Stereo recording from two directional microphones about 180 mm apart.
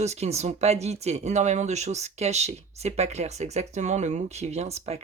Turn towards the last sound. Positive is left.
turn(degrees=-35)  # may be behind; listen again after turning